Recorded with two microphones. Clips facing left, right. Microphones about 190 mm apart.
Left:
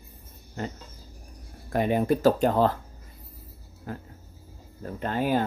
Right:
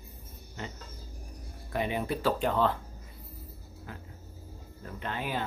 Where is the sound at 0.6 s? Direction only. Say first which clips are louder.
Left 7 dB; 45° left (ahead or behind).